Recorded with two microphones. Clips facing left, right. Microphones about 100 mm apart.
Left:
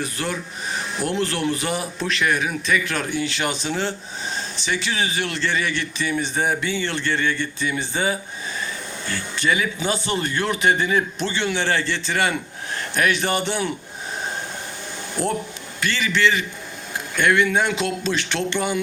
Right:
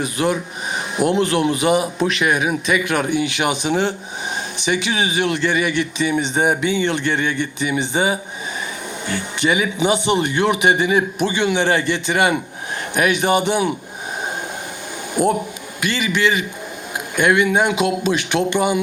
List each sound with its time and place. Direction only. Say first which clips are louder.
0.0 s speech: right 7 dB; 15° right (ahead or behind)
15.1 s speech: right 7 dB; 15° right (ahead or behind)